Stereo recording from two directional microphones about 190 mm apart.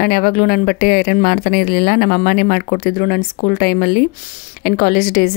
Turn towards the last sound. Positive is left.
turn(degrees=50)  # may be behind; listen again after turning